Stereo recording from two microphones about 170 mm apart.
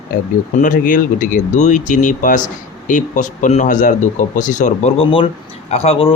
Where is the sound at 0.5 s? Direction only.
50° left (ahead or behind).